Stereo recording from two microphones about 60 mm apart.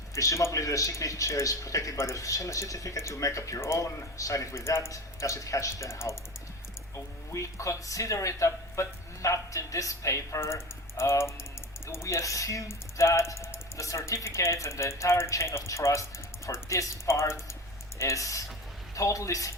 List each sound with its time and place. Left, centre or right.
0.1 s speech: left
3.6 s speech: left
4.5 s speech: left
4.9 s speech: left
18.0 s speech: left